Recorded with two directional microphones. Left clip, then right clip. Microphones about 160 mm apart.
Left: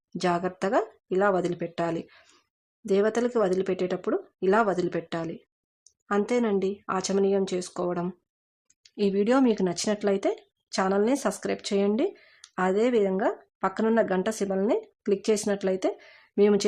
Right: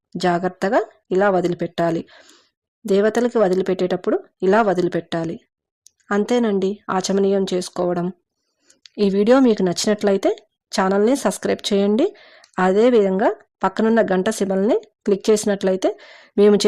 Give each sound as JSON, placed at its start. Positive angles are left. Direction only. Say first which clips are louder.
{"t": 0.2, "sound": "speech", "louder": "right 7 dB", "side_deg": -35}